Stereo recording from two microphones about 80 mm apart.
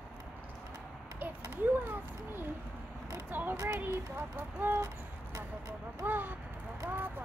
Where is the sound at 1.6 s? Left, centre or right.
Right.